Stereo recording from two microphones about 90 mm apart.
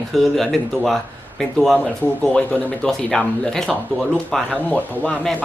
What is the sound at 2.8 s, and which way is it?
Speech, 5° left (ahead or behind).